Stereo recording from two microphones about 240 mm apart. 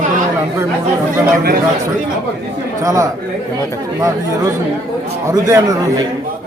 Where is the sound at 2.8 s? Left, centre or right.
Centre.